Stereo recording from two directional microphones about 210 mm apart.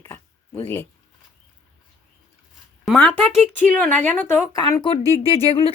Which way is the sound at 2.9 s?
Centre (ahead or behind).